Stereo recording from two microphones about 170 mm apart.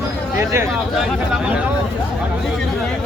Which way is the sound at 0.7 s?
Centre (ahead or behind).